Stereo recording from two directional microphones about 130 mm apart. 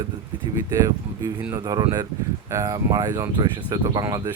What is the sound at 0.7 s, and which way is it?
Speech, 25° right (ahead or behind).